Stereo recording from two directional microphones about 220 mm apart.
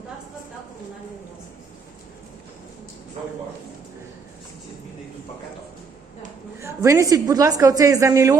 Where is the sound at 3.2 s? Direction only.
30° right (ahead or behind).